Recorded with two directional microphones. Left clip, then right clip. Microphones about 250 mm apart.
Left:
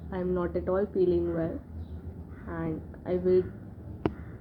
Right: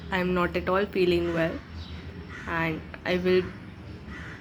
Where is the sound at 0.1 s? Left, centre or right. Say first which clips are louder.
Right 4 dB; centre.